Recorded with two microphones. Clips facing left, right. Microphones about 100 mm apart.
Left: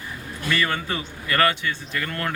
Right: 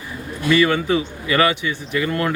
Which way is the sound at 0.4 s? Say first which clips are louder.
Right 8 dB; 10° right (ahead or behind).